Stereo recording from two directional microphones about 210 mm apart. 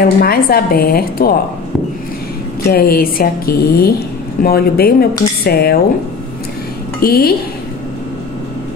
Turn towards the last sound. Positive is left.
turn(degrees=45)  # may be behind; listen again after turning